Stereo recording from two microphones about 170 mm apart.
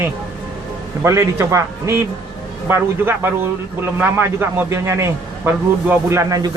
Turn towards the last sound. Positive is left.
turn(degrees=-20)  # may be behind; listen again after turning